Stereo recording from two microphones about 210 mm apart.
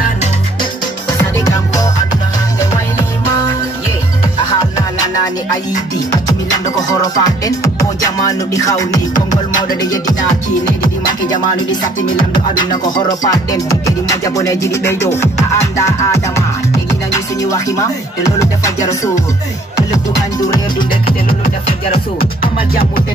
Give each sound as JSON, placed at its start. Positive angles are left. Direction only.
{"t": 4.6, "sound": "music", "side_deg": 15}
{"t": 7.0, "sound": "music", "side_deg": 15}
{"t": 13.2, "sound": "music", "side_deg": 15}